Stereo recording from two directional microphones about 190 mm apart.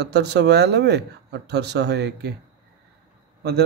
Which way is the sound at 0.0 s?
60° right (ahead or behind).